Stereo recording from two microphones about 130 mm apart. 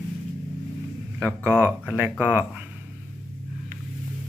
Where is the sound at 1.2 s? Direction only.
20° right (ahead or behind).